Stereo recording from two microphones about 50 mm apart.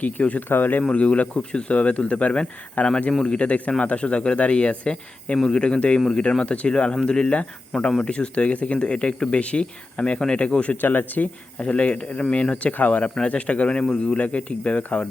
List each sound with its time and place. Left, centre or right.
0.0 s speech: left
0.4 s speech: left
0.9 s speech: left
2.8 s speech: left
3.1 s speech: centre
10.8 s speech: left
11.6 s speech: left